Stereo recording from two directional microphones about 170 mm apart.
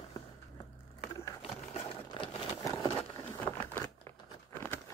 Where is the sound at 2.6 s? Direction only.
20° left (ahead or behind).